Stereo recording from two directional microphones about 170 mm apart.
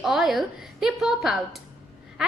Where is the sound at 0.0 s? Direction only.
Centre (ahead or behind).